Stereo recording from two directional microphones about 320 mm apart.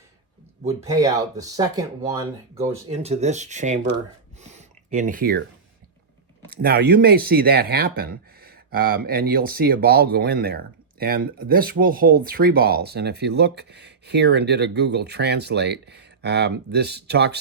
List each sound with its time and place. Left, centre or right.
0.9 s speech: centre
2.9 s speech: centre
4.4 s a sound: right
6.5 s speech: right